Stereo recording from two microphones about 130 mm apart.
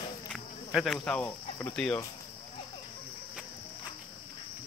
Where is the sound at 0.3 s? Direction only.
Centre (ahead or behind).